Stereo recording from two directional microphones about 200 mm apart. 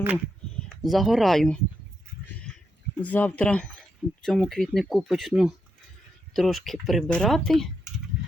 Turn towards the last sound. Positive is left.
turn(degrees=0)  # may be behind; listen again after turning